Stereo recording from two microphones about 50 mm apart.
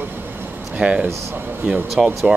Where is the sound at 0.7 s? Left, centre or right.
Right.